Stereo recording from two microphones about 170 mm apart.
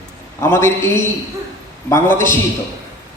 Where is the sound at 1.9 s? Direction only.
15° left (ahead or behind).